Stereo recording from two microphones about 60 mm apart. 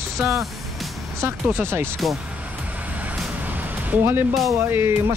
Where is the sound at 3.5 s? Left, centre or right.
Right.